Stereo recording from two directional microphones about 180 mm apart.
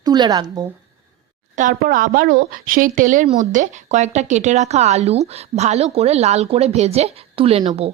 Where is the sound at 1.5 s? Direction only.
50° right (ahead or behind).